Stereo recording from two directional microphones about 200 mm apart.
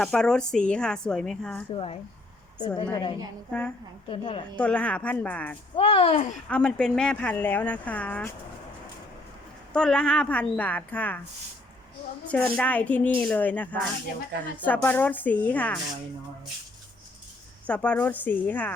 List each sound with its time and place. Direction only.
0.0 s a woman's voice: 5° left (ahead or behind)
1.7 s speech: 30° left (ahead or behind)
4.5 s speech: 5° left (ahead or behind)
5.7 s speech: 25° left (ahead or behind)
6.5 s speech: 5° left (ahead or behind)
9.7 s speech: 5° left (ahead or behind)
12.2 s speech: 5° left (ahead or behind)
17.7 s speech: 5° left (ahead or behind)